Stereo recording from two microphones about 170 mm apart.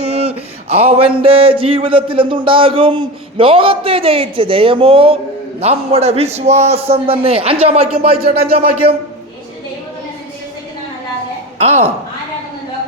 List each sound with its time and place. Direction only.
0.0 s a sound: 35° right (ahead or behind)
8.1 s speech: 65° right (ahead or behind)
11.5 s speech: 40° right (ahead or behind)